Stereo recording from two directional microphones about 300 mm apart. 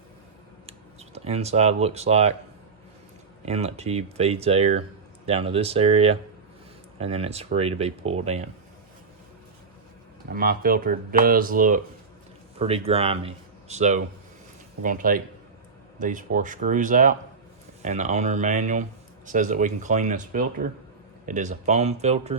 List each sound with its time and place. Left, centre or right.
0.7 s speech: right
3.4 s speech: right
10.2 s speech: right